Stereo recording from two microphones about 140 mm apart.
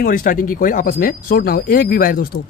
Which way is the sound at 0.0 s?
85° left.